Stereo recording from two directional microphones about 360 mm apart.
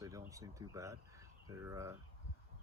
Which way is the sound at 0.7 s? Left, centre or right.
Centre.